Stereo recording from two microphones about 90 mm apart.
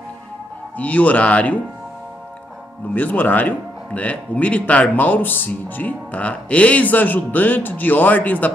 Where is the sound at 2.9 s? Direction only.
20° left (ahead or behind).